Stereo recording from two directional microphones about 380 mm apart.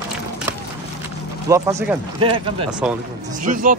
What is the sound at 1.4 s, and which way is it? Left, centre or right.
Speech, centre.